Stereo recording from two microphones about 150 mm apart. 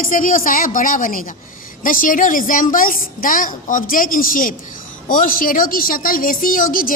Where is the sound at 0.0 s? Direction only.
65° left (ahead or behind).